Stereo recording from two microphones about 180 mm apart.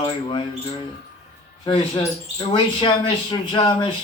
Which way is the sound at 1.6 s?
25° left (ahead or behind).